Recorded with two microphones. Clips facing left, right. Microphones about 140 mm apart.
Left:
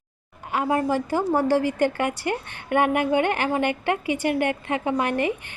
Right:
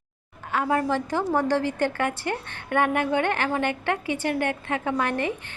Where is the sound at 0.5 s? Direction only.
10° left (ahead or behind).